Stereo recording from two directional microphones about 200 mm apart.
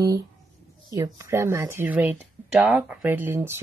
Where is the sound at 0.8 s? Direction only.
20° right (ahead or behind).